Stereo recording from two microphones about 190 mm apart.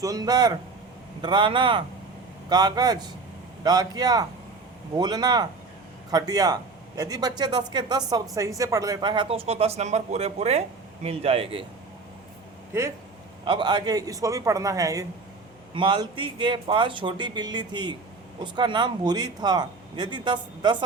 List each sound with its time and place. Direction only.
0.0 s a man's voice: 20° right (ahead or behind)
13.4 s a man's voice: 25° right (ahead or behind)